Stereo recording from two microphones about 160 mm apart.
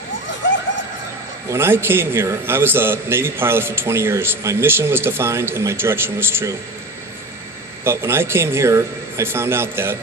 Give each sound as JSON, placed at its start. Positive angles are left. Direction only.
{"t": 1.5, "sound": "a man's voice", "side_deg": -15}
{"t": 7.9, "sound": "a man's voice", "side_deg": -15}